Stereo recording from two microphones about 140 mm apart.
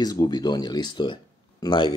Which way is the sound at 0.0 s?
25° left (ahead or behind).